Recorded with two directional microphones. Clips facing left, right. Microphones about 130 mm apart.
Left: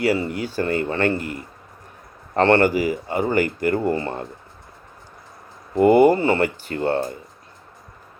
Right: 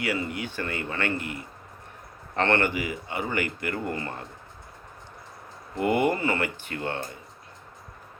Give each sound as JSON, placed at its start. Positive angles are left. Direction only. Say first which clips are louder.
{"t": 0.0, "sound": "speech", "louder": "left 8 dB", "side_deg": 35}
{"t": 5.8, "sound": "speech", "louder": "left 10 dB", "side_deg": 35}